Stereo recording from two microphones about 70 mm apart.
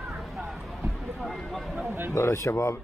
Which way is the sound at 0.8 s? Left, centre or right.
Centre.